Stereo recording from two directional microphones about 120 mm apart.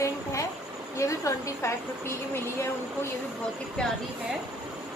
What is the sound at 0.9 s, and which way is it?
Speech, 25° left (ahead or behind).